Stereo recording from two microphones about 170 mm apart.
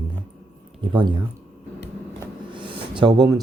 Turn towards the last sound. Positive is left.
turn(degrees=-25)  # may be behind; listen again after turning